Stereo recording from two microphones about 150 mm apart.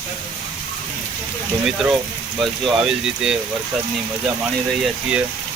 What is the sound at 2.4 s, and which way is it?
Speech, 5° right (ahead or behind).